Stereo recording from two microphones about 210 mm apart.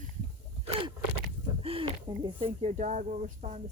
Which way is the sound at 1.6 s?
25° right (ahead or behind).